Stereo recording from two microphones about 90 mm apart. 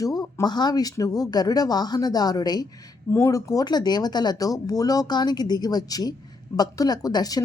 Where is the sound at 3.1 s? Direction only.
35° left (ahead or behind).